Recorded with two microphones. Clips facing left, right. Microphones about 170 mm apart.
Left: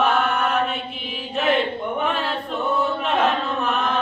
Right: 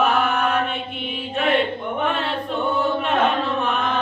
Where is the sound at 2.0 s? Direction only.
Centre (ahead or behind).